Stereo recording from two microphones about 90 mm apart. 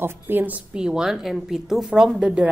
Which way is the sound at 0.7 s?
10° right (ahead or behind).